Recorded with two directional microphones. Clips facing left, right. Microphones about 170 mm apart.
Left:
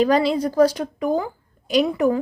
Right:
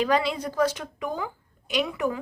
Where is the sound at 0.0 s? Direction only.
35° left (ahead or behind).